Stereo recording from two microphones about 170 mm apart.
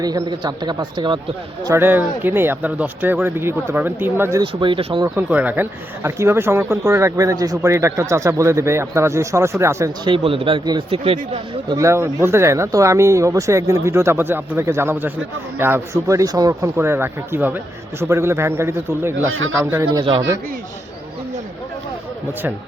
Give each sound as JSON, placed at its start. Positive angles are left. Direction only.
{"t": 0.0, "sound": "speech", "side_deg": -25}
{"t": 1.6, "sound": "speech", "side_deg": -15}
{"t": 4.6, "sound": "speech", "side_deg": -30}
{"t": 5.0, "sound": "speech", "side_deg": -10}
{"t": 10.1, "sound": "speech", "side_deg": -30}
{"t": 11.8, "sound": "speech", "side_deg": -15}